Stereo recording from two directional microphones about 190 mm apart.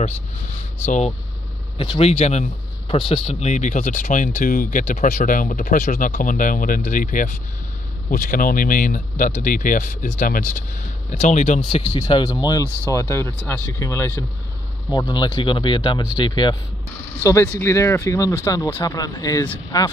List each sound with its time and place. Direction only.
0.8 s speech: 40° left (ahead or behind)
11.9 s speech: 20° left (ahead or behind)
12.6 s speech: 15° right (ahead or behind)
12.9 s speech: 15° left (ahead or behind)